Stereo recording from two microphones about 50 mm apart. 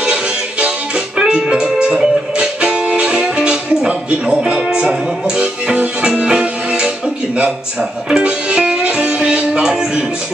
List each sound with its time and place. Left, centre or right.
0.0 s music: centre
8.1 s music: right